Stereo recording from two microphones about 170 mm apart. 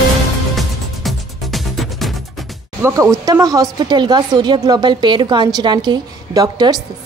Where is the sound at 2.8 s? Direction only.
15° right (ahead or behind).